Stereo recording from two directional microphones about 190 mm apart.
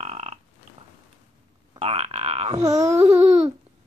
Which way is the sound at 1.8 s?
30° right (ahead or behind).